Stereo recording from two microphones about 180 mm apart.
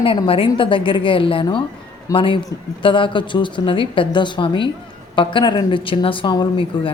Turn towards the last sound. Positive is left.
turn(degrees=25)  # may be behind; listen again after turning